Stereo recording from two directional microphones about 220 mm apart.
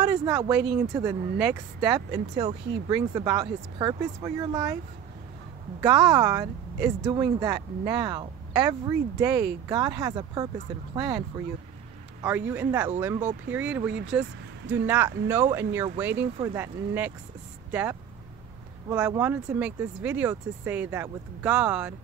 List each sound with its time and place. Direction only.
0.0 s speech: 15° right (ahead or behind)
5.8 s speech: 15° right (ahead or behind)
12.2 s speech: 10° right (ahead or behind)